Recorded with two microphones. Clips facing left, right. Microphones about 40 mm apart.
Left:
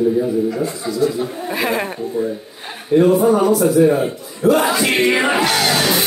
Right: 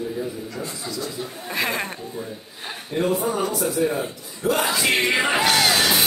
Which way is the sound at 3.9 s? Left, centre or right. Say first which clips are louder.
Left 8 dB; left.